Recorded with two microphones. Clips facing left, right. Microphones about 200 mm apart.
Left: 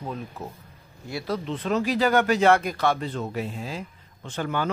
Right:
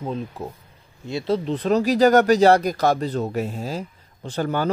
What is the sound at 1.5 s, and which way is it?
Speech, 40° right (ahead or behind).